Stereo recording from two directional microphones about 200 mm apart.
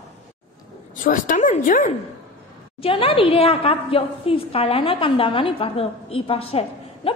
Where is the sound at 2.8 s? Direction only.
25° left (ahead or behind).